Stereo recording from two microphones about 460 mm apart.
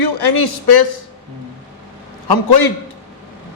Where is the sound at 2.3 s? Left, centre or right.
Left.